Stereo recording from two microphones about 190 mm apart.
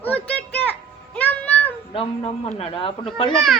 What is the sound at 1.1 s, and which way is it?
Music, 10° left (ahead or behind).